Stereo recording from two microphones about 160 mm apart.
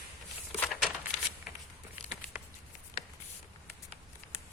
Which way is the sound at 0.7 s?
Centre (ahead or behind).